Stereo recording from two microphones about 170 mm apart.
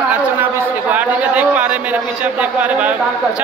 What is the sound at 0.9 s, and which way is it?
A man's voice, 10° right (ahead or behind).